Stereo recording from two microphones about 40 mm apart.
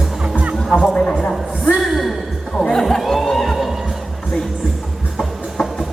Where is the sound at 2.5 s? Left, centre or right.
Centre.